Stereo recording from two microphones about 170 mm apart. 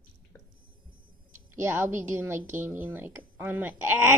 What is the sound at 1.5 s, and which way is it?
Speech, 15° right (ahead or behind).